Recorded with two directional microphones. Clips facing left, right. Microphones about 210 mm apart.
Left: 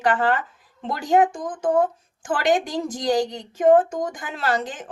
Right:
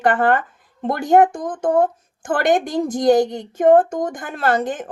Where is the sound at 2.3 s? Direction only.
55° right (ahead or behind).